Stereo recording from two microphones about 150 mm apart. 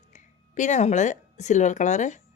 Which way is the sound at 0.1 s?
55° left (ahead or behind).